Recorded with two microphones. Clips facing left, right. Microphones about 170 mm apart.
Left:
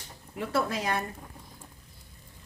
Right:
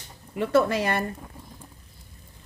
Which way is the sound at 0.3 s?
75° right (ahead or behind).